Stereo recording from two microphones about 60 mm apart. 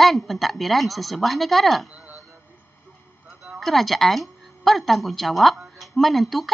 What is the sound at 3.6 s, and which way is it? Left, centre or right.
A woman's voice, centre.